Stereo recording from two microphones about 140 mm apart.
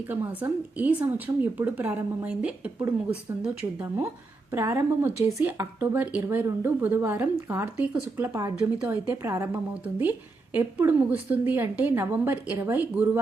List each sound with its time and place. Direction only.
0.3 s a woman's voice: 10° right (ahead or behind)